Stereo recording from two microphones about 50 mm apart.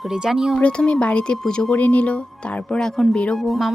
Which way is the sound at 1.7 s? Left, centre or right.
Left.